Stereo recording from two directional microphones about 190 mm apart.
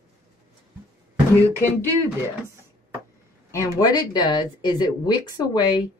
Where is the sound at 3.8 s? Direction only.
20° left (ahead or behind).